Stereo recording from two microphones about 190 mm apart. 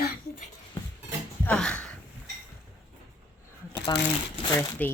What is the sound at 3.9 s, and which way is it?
Speech, 20° left (ahead or behind).